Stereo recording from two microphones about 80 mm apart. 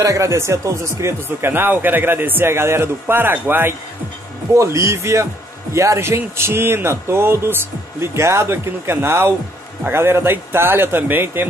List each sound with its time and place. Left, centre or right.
0.0 s speech: right
4.6 s a man's voice: right